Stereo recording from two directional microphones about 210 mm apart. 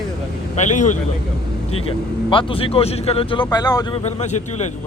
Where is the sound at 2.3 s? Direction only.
25° left (ahead or behind).